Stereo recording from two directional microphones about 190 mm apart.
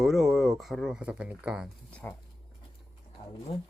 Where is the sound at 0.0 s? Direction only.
Centre (ahead or behind).